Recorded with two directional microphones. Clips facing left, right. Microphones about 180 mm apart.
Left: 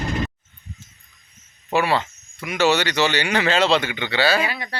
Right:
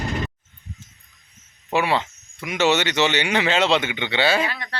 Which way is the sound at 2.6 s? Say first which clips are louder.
Even; 20° right (ahead or behind).